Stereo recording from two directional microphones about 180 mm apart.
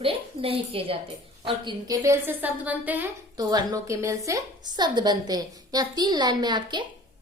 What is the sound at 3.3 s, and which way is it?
A woman's voice, 20° right (ahead or behind).